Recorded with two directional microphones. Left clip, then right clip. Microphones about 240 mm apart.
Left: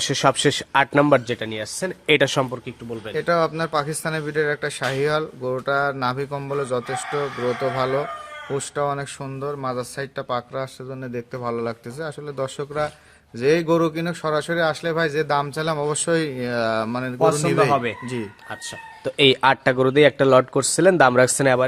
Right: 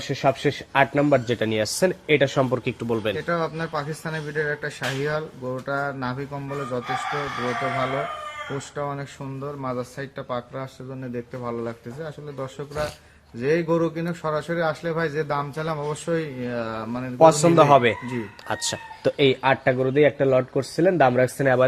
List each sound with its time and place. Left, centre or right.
0.0 s speech: centre
1.4 s a man's voice: centre
2.0 s speech: left
2.6 s speech: right
3.2 s speech: left
8.5 s speech: left
17.2 s a man's voice: centre
19.1 s speech: centre